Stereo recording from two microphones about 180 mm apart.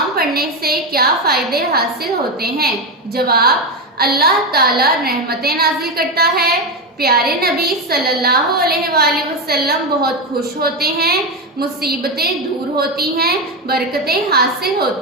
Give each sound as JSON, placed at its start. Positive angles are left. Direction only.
{"t": 0.2, "sound": "a woman's voice", "side_deg": -60}
{"t": 3.2, "sound": "a woman's voice", "side_deg": -60}